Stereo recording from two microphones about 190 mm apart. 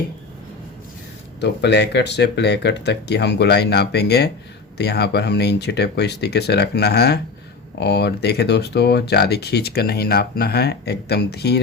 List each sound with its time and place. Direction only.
1.4 s speech: 65° left (ahead or behind)